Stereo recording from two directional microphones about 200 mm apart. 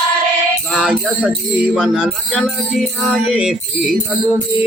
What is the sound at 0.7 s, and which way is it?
Music, centre (ahead or behind).